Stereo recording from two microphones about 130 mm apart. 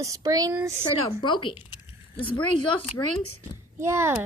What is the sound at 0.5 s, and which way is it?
Speech, 20° right (ahead or behind).